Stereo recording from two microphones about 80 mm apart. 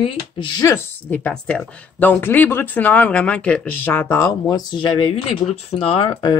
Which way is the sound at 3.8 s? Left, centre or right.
Left.